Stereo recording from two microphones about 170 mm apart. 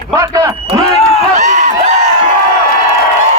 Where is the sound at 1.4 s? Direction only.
45° right (ahead or behind).